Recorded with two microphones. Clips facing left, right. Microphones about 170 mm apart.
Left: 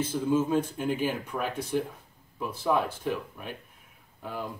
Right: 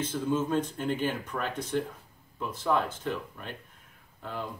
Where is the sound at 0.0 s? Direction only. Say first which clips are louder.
Left 3 dB; 10° left (ahead or behind).